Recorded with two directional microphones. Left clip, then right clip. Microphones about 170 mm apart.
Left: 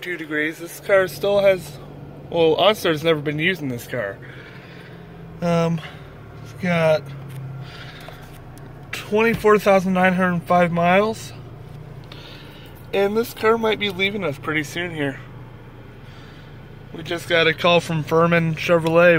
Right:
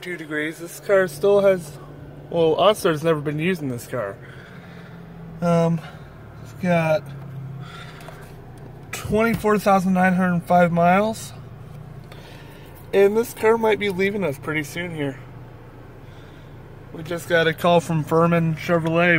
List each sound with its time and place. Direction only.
0.0 s speech: 15° right (ahead or behind)
5.4 s speech: 10° right (ahead or behind)
8.9 s a sound: 25° right (ahead or behind)
9.4 s speech: 15° right (ahead or behind)
12.9 s speech: 30° right (ahead or behind)
14.5 s speech: centre (ahead or behind)
16.9 s speech: 5° right (ahead or behind)
18.4 s speech: 10° left (ahead or behind)